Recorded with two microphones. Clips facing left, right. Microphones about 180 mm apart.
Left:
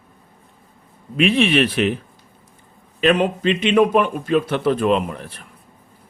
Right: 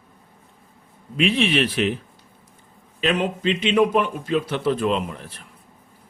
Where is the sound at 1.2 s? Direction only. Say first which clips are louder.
Left 4 dB; 60° left (ahead or behind).